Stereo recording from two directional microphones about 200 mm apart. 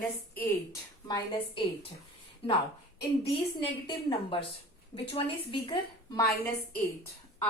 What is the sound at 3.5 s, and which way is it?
A woman's voice, 25° left (ahead or behind).